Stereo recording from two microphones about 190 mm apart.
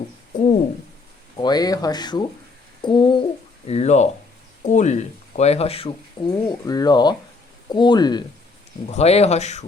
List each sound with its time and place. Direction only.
1.4 s speech: 20° left (ahead or behind)
8.9 s speech: 35° left (ahead or behind)